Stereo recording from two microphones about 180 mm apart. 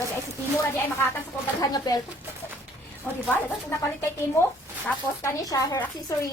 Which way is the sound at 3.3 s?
15° left (ahead or behind).